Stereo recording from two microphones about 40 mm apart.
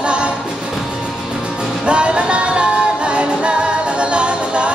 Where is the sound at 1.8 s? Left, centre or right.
Right.